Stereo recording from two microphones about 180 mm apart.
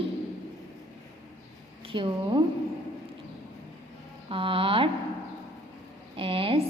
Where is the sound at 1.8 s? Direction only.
30° right (ahead or behind).